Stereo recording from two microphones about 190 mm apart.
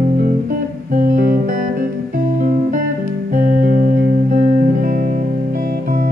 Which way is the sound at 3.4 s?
45° right (ahead or behind).